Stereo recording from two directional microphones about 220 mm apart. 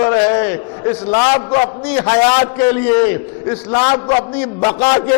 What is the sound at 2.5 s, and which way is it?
A man's voice, 10° left (ahead or behind).